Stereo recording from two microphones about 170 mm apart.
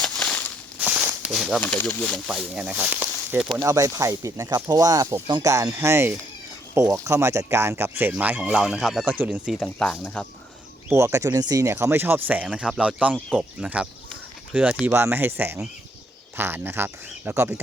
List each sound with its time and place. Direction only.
0.0 s a sound: 5° left (ahead or behind)
0.8 s a sound: 10° right (ahead or behind)
1.6 s speech: 10° left (ahead or behind)
2.2 s speech: 5° right (ahead or behind)
3.7 s speech: 20° right (ahead or behind); by 10.2 s 5° left (ahead or behind)
10.8 s speech: 15° right (ahead or behind)